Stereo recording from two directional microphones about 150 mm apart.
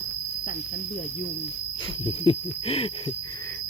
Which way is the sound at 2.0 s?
40° left (ahead or behind).